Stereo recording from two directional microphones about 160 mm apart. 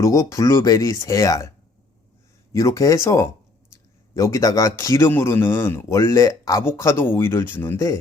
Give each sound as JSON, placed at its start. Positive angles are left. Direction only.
{"t": 0.0, "sound": "a man's voice", "side_deg": 20}